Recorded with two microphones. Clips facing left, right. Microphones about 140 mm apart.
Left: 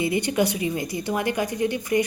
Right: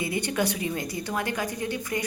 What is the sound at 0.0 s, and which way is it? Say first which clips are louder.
A woman's voice: left 5 dB; 15° left (ahead or behind).